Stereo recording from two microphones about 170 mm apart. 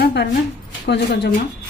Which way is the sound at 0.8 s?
85° left.